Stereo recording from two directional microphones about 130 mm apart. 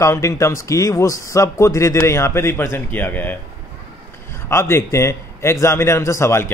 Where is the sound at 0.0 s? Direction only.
25° left (ahead or behind).